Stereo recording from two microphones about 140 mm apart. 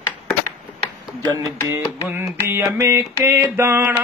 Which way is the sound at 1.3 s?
25° right (ahead or behind).